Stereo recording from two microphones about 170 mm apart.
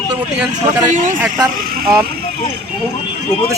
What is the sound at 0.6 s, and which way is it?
Speech, 45° right (ahead or behind).